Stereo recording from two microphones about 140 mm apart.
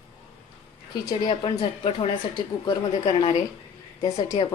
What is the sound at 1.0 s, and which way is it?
A woman's voice, 35° left (ahead or behind).